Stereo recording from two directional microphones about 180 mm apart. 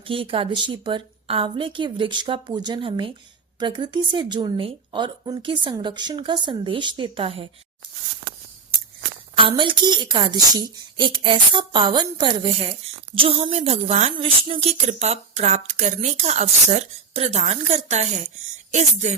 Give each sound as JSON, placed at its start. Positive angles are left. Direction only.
{"t": 0.0, "sound": "speech", "side_deg": -30}
{"t": 9.3, "sound": "speech", "side_deg": -30}